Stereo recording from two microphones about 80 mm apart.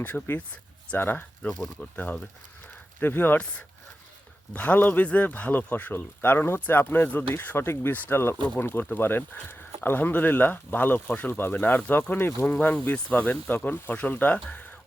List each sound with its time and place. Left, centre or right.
0.0 s speech: left
1.5 s speech: centre
3.0 s speech: left
4.5 s speech: left